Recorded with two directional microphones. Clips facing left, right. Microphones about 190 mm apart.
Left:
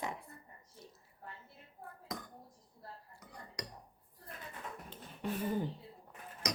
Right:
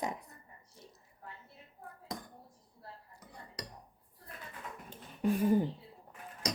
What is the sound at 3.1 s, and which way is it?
Cutlery, 30° right (ahead or behind).